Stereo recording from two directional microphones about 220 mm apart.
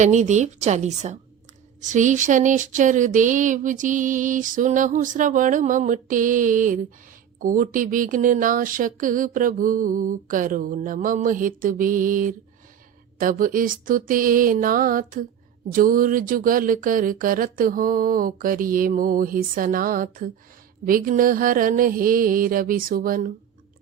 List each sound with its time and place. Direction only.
0.0 s speech: 35° right (ahead or behind)